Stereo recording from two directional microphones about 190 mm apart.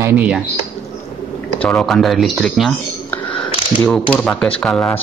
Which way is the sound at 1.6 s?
5° left (ahead or behind).